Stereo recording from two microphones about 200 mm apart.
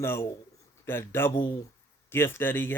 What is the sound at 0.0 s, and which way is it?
Speech, 10° left (ahead or behind).